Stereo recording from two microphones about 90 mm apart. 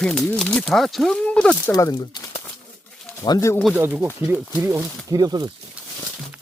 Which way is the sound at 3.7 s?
25° right (ahead or behind).